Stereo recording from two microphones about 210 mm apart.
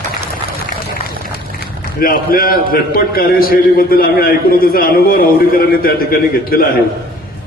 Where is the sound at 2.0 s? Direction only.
45° left (ahead or behind).